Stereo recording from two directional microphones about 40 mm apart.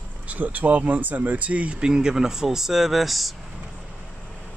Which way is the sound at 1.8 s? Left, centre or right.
Centre.